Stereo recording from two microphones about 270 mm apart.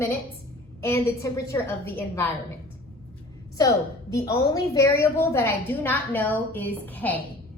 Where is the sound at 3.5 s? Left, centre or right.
Centre.